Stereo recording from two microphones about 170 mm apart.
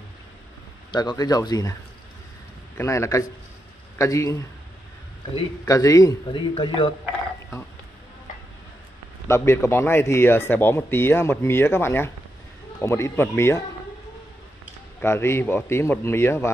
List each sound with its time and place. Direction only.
0.9 s speech: 25° left (ahead or behind)
2.8 s speech: 15° left (ahead or behind)
5.7 s speech: 20° left (ahead or behind)
9.3 s speech: 15° left (ahead or behind)
15.0 s speech: 15° left (ahead or behind)